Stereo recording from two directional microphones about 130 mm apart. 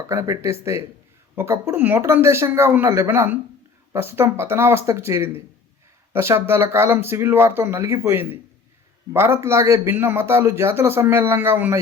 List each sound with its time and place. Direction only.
0.1 s a man's voice: 20° right (ahead or behind)